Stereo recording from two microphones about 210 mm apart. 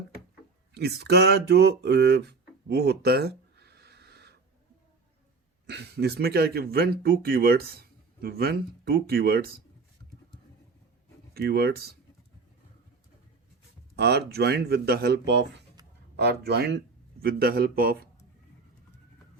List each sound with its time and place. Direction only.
0.7 s speech: 50° right (ahead or behind)
5.6 s speech: 50° right (ahead or behind)
11.3 s speech: 50° right (ahead or behind)
13.9 s speech: 50° right (ahead or behind)